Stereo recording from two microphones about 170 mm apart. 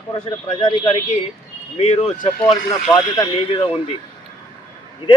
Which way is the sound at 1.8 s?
35° left (ahead or behind).